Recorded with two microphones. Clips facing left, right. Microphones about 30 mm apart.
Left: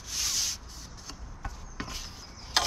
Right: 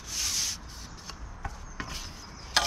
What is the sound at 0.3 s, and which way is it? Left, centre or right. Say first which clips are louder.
Rub: even; centre.